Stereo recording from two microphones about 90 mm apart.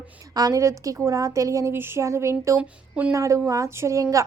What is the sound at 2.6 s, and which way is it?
Speech, 15° right (ahead or behind).